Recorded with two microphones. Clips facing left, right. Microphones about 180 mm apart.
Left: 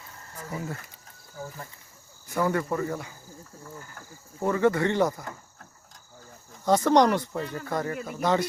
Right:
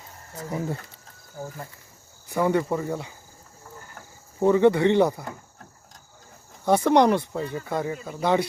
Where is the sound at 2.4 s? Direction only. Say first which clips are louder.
Right 3 dB; 20° right (ahead or behind).